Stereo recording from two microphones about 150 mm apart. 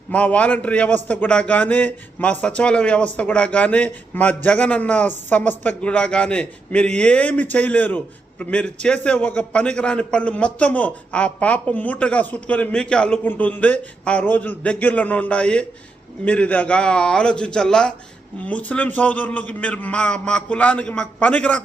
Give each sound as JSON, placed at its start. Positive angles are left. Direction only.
{"t": 0.1, "sound": "a man's voice", "side_deg": 10}